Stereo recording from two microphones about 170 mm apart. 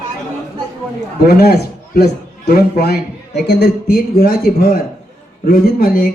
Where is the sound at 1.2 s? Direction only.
70° left (ahead or behind).